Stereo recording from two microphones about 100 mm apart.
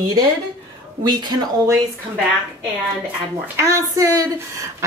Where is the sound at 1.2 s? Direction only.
45° right (ahead or behind).